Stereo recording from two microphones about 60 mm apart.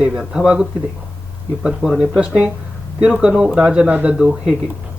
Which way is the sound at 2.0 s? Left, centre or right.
Centre.